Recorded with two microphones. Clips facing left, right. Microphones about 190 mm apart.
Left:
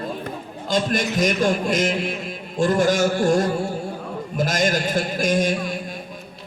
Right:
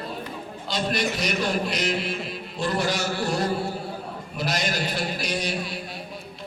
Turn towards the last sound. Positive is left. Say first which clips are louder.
# left 8 dB
turn(degrees=45)  # may be behind; listen again after turning